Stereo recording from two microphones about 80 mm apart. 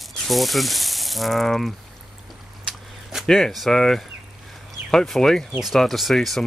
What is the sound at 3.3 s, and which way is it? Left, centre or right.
Speech, centre.